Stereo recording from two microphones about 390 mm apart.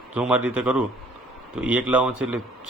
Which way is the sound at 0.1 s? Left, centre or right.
Centre.